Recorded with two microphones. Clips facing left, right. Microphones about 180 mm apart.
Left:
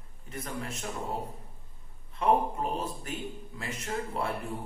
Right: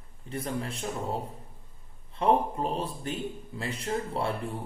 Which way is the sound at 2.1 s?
30° right (ahead or behind).